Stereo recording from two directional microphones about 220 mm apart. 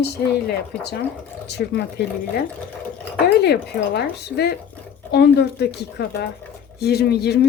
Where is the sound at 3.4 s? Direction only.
45° left (ahead or behind).